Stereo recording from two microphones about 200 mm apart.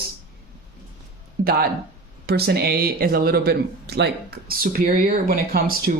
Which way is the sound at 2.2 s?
50° right (ahead or behind).